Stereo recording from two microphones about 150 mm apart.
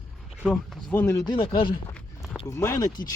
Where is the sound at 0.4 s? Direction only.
5° left (ahead or behind).